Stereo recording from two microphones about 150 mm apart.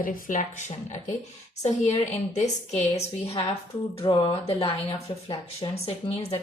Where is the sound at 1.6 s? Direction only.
50° left (ahead or behind).